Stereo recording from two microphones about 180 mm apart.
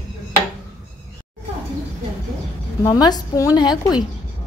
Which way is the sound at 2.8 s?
20° left (ahead or behind).